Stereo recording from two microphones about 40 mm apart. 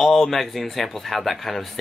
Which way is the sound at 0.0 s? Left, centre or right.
Centre.